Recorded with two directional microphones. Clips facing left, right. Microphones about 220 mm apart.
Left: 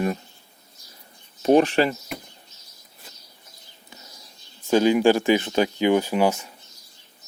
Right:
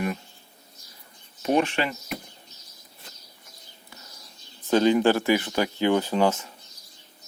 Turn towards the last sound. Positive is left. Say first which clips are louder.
# left 1 dB
turn(degrees=10)  # may be behind; listen again after turning